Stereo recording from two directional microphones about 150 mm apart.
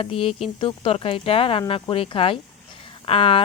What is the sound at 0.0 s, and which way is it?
Speech, 40° left (ahead or behind).